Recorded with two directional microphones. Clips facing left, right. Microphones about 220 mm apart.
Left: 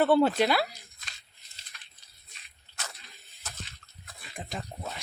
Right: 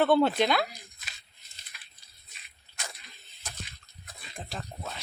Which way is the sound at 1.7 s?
10° right (ahead or behind).